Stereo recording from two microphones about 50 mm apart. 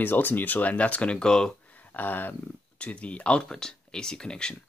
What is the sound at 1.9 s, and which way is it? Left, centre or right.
Speech, left.